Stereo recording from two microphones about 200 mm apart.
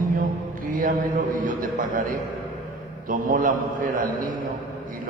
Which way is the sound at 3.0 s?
40° right (ahead or behind).